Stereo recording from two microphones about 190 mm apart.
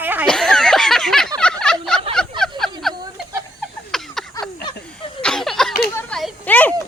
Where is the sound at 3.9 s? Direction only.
Centre (ahead or behind).